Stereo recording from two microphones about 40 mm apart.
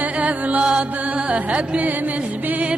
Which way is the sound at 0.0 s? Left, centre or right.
Right.